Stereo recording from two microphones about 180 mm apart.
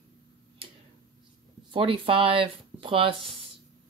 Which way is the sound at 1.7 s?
30° right (ahead or behind).